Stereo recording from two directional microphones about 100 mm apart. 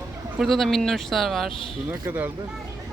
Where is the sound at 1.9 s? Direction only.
20° right (ahead or behind).